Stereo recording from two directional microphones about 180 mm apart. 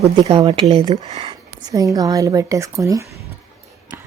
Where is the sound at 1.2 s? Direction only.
20° right (ahead or behind).